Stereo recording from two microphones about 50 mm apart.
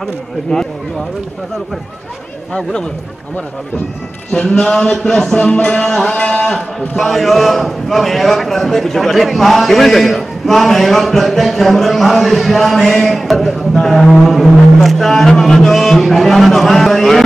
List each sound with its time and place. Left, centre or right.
4.3 s speech: centre
5.5 s music: left
5.9 s speech: centre
6.1 s music: left
6.4 s a man's voice: centre